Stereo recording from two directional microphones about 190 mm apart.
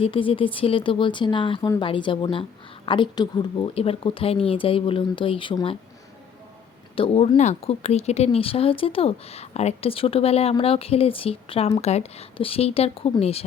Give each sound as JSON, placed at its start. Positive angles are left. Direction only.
{"t": 0.0, "sound": "speech", "side_deg": 30}
{"t": 6.9, "sound": "speech", "side_deg": 30}